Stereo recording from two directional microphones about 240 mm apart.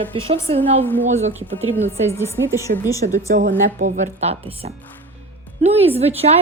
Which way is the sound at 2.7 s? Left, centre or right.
Right.